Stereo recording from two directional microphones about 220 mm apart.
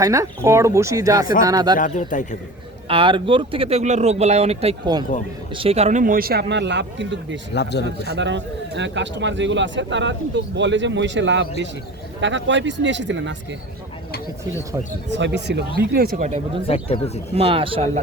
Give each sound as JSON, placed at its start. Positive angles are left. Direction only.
{"t": 0.0, "sound": "speech", "side_deg": -15}
{"t": 1.8, "sound": "a man's voice", "side_deg": 35}
{"t": 2.9, "sound": "speech", "side_deg": -20}
{"t": 7.5, "sound": "a man's voice", "side_deg": 50}
{"t": 7.9, "sound": "speech", "side_deg": -50}
{"t": 15.8, "sound": "speech", "side_deg": -45}
{"t": 16.6, "sound": "speech", "side_deg": 25}
{"t": 17.3, "sound": "speech", "side_deg": -25}